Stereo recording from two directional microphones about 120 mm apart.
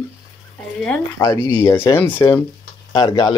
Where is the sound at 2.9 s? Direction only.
35° left (ahead or behind).